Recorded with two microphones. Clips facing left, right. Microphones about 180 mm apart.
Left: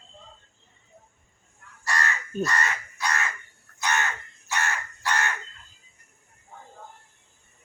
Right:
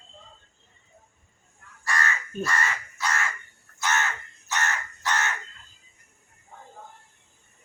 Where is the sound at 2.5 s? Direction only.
15° left (ahead or behind).